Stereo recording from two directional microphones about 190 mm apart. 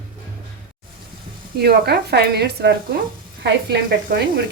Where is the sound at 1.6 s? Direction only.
55° right (ahead or behind).